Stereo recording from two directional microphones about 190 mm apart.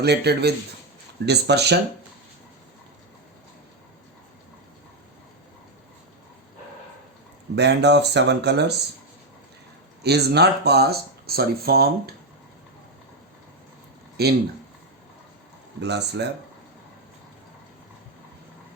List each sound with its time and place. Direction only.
0.0 s speech: 60° right (ahead or behind)
7.5 s speech: 60° right (ahead or behind)
10.0 s speech: 60° right (ahead or behind)
14.2 s speech: 60° right (ahead or behind)
15.8 s speech: 65° right (ahead or behind)